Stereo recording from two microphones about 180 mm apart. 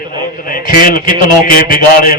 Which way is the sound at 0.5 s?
50° left (ahead or behind).